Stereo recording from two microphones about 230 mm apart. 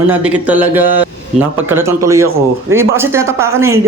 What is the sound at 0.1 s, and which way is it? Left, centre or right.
A man's voice, centre.